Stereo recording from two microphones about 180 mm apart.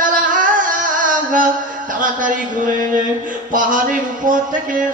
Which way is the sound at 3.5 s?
45° right (ahead or behind).